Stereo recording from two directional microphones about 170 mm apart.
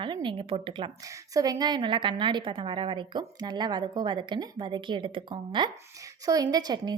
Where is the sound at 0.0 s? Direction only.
25° right (ahead or behind).